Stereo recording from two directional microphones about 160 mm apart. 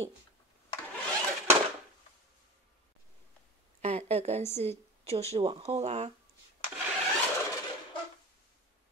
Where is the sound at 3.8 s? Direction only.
40° right (ahead or behind).